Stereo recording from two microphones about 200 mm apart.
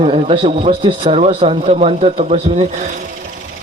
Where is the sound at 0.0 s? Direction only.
30° right (ahead or behind).